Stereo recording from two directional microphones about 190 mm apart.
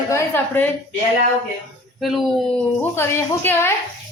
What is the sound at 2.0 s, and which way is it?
A woman's voice, centre (ahead or behind).